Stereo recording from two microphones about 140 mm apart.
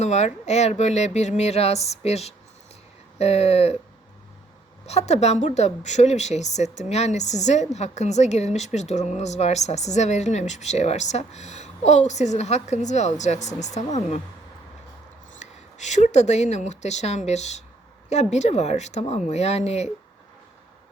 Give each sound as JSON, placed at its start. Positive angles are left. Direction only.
{"t": 0.0, "sound": "speech", "side_deg": 55}
{"t": 4.9, "sound": "a woman's voice", "side_deg": 50}
{"t": 15.4, "sound": "speech", "side_deg": 55}